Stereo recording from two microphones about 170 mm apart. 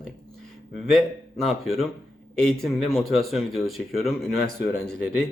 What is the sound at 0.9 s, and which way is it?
Speech, centre (ahead or behind).